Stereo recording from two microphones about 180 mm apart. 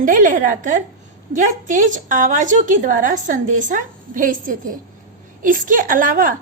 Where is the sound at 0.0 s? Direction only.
50° right (ahead or behind).